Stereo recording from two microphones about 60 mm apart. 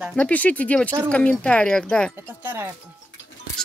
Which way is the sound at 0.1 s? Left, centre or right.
Left.